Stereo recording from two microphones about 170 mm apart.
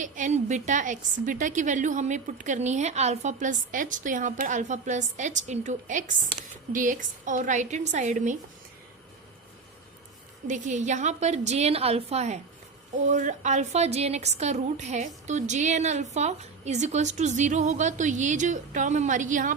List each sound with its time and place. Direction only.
0.0 s a woman's voice: 45° right (ahead or behind)
10.4 s a woman's voice: 45° right (ahead or behind)